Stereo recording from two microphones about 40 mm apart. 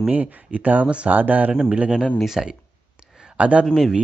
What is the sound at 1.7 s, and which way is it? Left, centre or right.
Speech, right.